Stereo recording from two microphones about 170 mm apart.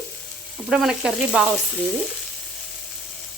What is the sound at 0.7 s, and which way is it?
Frying, 5° right (ahead or behind).